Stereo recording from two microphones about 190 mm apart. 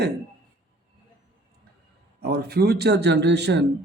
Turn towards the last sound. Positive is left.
turn(degrees=-65)  # may be behind; listen again after turning